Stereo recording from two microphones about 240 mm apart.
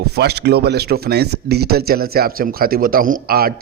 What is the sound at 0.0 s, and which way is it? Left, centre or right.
Speech, right.